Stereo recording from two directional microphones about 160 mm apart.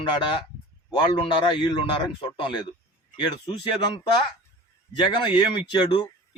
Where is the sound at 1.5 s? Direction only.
30° left (ahead or behind).